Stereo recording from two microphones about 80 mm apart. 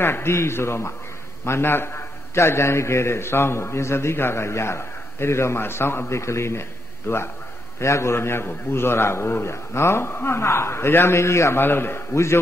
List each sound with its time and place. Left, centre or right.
0.0 s a man's voice: left